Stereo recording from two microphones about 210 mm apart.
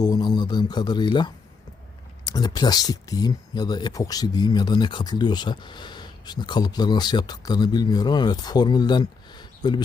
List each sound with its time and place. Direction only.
0.0 s speech: 20° left (ahead or behind)